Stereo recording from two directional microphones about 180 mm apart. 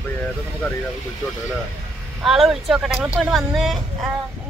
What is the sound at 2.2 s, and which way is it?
A woman's voice, centre (ahead or behind).